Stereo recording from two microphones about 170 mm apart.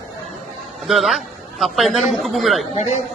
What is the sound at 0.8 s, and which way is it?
A man's voice, centre (ahead or behind).